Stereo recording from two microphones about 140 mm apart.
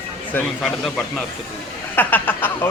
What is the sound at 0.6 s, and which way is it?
Speech, centre (ahead or behind).